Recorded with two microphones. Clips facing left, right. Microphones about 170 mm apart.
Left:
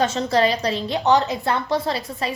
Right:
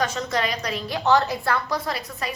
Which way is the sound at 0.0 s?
30° left (ahead or behind).